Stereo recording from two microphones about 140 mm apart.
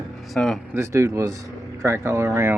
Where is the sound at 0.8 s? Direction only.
20° right (ahead or behind).